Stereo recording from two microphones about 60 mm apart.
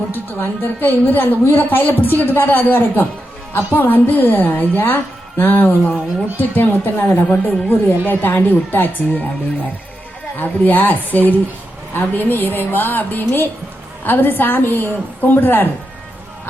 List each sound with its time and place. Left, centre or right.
0.1 s a woman's voice: left
10.3 s a woman's voice: left